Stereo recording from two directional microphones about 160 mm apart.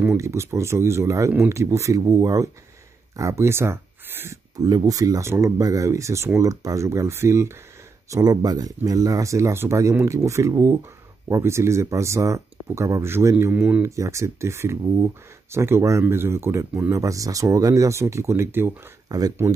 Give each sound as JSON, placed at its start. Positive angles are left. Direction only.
{"t": 0.0, "sound": "speech", "side_deg": -15}